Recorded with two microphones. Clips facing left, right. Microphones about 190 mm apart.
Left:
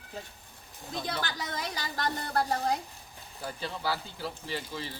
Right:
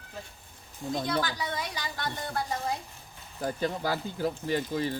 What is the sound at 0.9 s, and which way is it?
Speech, 55° right (ahead or behind).